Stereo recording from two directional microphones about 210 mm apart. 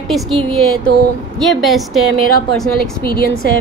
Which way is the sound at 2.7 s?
45° left (ahead or behind).